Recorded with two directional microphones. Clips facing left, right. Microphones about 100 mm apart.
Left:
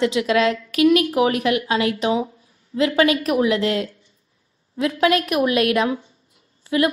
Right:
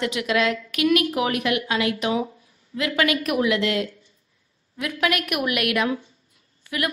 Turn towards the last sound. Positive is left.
turn(degrees=30)  # may be behind; listen again after turning